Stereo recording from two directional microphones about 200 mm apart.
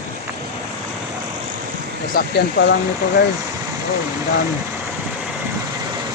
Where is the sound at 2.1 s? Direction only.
55° left (ahead or behind).